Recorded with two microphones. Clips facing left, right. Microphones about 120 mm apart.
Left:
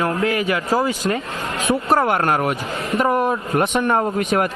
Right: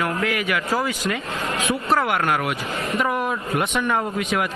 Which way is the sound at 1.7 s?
30° left (ahead or behind).